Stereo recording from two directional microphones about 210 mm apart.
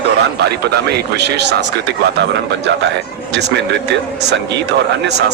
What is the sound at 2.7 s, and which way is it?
Speech, 60° right (ahead or behind).